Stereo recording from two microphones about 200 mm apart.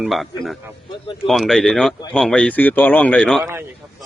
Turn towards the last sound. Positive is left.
turn(degrees=-10)  # may be behind; listen again after turning